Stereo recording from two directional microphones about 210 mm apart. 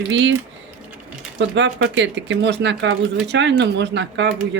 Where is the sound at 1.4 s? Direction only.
60° right (ahead or behind).